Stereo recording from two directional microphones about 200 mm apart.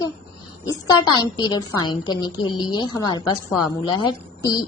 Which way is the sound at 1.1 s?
20° left (ahead or behind).